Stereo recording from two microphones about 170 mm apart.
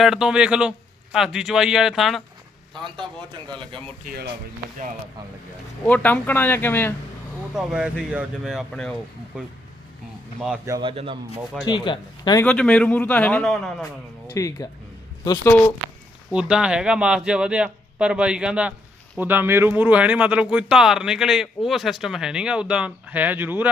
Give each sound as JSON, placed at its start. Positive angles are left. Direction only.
{"t": 0.0, "sound": "speech", "side_deg": 0}
{"t": 2.7, "sound": "a man's voice", "side_deg": -30}
{"t": 4.0, "sound": "speech", "side_deg": -60}
{"t": 5.8, "sound": "a man's voice", "side_deg": 10}
{"t": 7.5, "sound": "speech", "side_deg": -5}
{"t": 10.7, "sound": "a man's voice", "side_deg": -30}
{"t": 11.6, "sound": "speech", "side_deg": 25}
{"t": 12.4, "sound": "a man's voice", "side_deg": 5}
{"t": 14.3, "sound": "speech", "side_deg": 20}
{"t": 16.3, "sound": "speech", "side_deg": -5}